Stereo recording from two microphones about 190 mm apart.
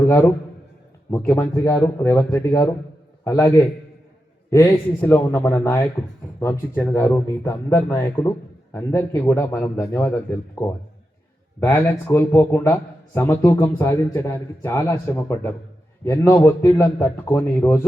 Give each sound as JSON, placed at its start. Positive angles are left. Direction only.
{"t": 1.4, "sound": "speech", "side_deg": 15}
{"t": 4.5, "sound": "speech", "side_deg": 15}